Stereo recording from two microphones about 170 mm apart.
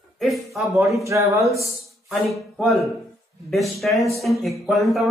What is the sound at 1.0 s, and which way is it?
Speech, 20° right (ahead or behind).